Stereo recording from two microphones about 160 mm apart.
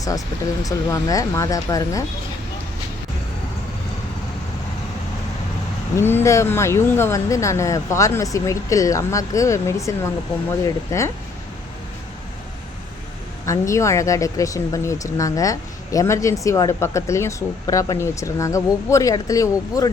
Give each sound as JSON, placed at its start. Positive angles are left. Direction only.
{"t": 0.6, "sound": "speech", "side_deg": 20}
{"t": 6.0, "sound": "speech", "side_deg": 15}
{"t": 10.9, "sound": "speech", "side_deg": 20}
{"t": 13.4, "sound": "speech", "side_deg": 20}